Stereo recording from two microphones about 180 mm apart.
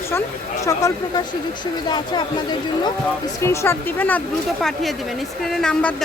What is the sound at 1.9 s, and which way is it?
Speech, 25° left (ahead or behind).